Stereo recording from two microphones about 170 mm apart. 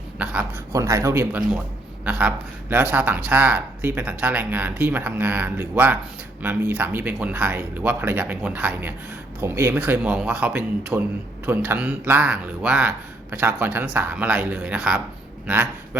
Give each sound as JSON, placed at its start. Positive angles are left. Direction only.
{"t": 0.7, "sound": "a man's voice", "side_deg": -20}